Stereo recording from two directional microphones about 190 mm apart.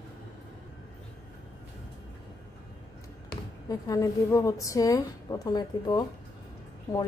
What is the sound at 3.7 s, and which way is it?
A woman's voice, 15° left (ahead or behind).